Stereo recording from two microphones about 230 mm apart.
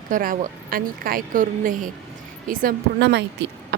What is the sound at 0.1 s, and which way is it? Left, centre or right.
Speech, right.